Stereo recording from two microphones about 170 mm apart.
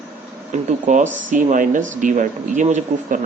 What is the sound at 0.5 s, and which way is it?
A man's voice, 45° right (ahead or behind).